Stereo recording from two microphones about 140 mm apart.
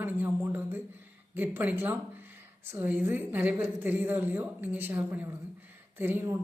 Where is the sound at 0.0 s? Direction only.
15° right (ahead or behind).